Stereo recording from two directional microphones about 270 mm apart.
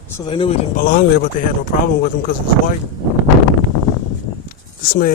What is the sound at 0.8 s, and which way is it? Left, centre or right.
Speech, left.